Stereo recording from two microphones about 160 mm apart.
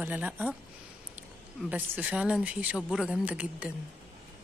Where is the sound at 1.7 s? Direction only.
10° right (ahead or behind).